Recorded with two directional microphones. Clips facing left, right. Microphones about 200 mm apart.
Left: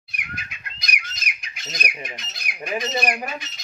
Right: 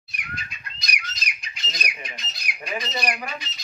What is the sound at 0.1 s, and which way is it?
Bird, 55° left (ahead or behind).